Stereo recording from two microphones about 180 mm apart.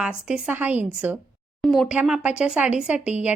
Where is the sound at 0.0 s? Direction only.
5° right (ahead or behind).